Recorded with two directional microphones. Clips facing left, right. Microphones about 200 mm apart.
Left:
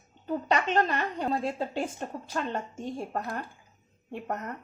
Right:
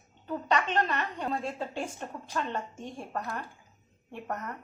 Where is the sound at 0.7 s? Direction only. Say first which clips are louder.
Left 3 dB; 35° left (ahead or behind).